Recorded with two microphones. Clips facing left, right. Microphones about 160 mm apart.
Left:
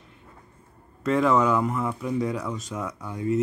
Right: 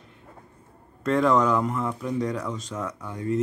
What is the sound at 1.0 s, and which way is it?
Speech, 5° left (ahead or behind).